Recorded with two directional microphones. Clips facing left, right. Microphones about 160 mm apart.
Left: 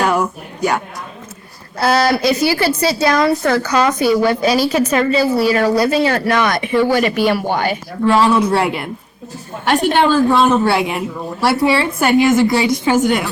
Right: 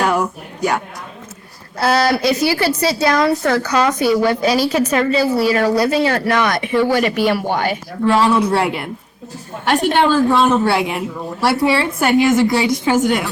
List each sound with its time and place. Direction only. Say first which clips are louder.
0.0 s a woman's voice: left 1 dB; 20° left (ahead or behind)